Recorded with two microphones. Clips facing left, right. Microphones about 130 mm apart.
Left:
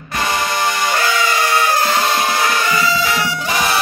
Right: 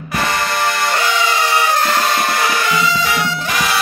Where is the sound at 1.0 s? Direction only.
15° right (ahead or behind).